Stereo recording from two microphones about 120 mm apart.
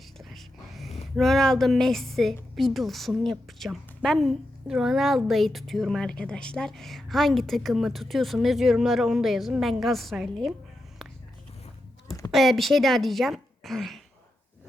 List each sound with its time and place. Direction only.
0.2 s a sound: centre (ahead or behind)
1.1 s a woman's voice: centre (ahead or behind)
12.3 s speech: centre (ahead or behind)